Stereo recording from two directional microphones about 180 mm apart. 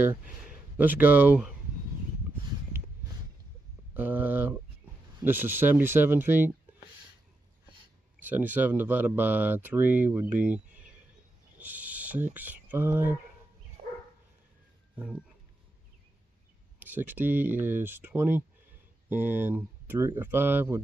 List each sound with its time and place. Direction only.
0.7 s speech: 10° right (ahead or behind)
3.9 s speech: 10° right (ahead or behind)
8.2 s speech: 10° right (ahead or behind)
11.5 s owl: 10° right (ahead or behind)
12.4 s speech: 10° right (ahead or behind)
13.8 s dog: 30° right (ahead or behind)
15.0 s speech: 5° right (ahead or behind)
16.8 s speech: 10° right (ahead or behind)